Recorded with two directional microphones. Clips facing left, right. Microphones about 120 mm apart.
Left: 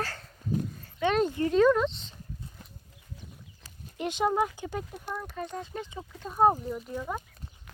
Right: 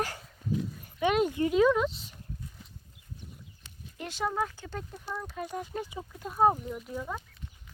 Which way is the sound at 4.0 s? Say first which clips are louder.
Left 5 dB; 20° left (ahead or behind).